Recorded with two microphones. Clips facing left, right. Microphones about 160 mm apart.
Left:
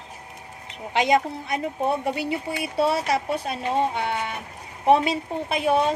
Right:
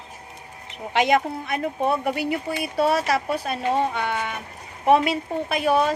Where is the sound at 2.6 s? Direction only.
25° left (ahead or behind).